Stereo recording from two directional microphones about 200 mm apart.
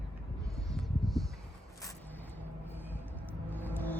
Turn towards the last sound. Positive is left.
turn(degrees=10)  # may be behind; listen again after turning